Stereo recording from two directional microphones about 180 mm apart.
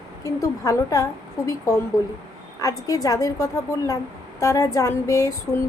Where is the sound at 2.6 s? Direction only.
20° left (ahead or behind).